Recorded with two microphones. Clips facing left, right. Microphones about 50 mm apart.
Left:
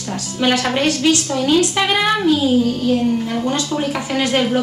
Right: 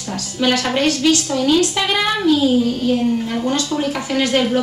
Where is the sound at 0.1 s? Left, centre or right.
Centre.